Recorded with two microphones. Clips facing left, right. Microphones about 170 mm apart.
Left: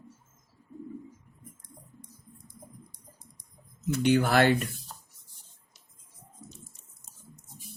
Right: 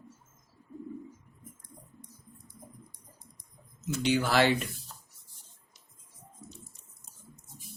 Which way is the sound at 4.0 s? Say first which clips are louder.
Left 3 dB; 55° left (ahead or behind).